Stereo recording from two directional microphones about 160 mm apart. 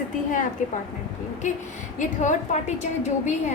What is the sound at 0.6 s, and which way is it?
A woman's voice, 55° left (ahead or behind).